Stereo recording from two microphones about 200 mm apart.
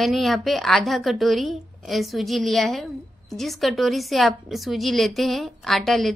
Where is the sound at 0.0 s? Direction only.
Centre (ahead or behind).